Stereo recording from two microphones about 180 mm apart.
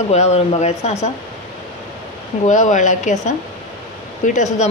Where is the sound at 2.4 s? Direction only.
45° left (ahead or behind).